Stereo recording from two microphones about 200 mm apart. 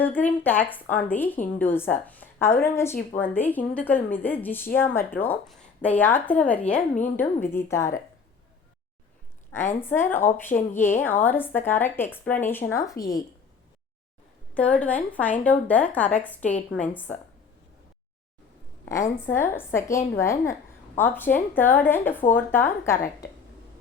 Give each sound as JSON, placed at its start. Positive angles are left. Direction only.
{"t": 0.0, "sound": "a woman's voice", "side_deg": 10}
{"t": 9.5, "sound": "a woman's voice", "side_deg": 10}
{"t": 14.5, "sound": "a woman's voice", "side_deg": 5}
{"t": 19.2, "sound": "a woman's voice", "side_deg": 10}